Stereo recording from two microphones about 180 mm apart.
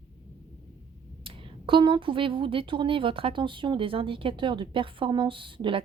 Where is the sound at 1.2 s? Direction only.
25° right (ahead or behind).